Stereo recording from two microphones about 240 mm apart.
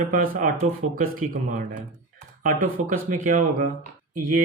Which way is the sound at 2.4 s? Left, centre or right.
Right.